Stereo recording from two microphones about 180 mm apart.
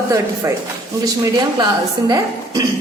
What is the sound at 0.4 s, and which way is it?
A woman's voice, 15° right (ahead or behind).